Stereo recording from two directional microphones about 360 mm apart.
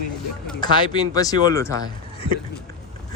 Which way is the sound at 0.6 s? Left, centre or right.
Centre.